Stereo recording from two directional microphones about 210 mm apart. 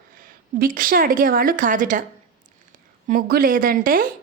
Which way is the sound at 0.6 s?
40° right (ahead or behind).